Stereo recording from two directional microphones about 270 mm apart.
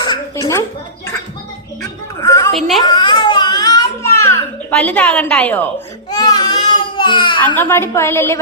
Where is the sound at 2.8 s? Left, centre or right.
Centre.